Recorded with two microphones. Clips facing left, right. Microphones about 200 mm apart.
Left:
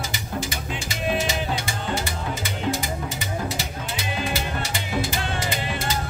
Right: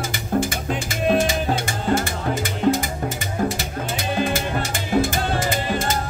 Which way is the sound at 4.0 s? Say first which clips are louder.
Right 5 dB; 50° right (ahead or behind).